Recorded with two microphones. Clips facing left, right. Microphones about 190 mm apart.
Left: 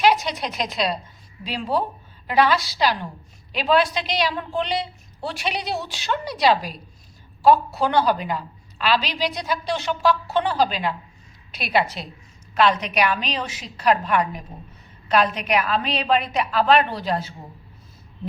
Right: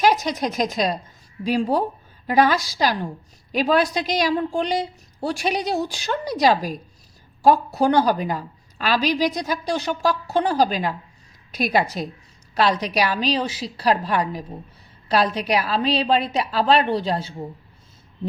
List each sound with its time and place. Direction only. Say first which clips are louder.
0.0 s a woman's voice: right 1 dB; 45° right (ahead or behind)